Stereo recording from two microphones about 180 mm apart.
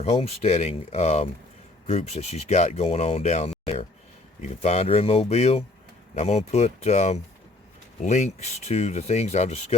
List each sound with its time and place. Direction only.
0.0 s speech: 35° left (ahead or behind)